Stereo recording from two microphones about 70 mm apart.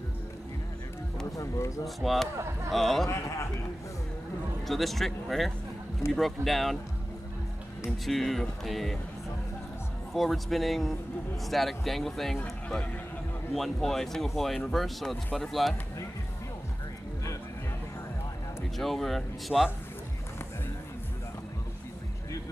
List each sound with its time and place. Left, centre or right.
1.3 s a sound: left
2.0 s speech: centre
3.1 s a man's voice: left
4.6 s speech: centre
8.0 s speech: centre
10.1 s speech: centre
13.5 s speech: centre
18.8 s speech: centre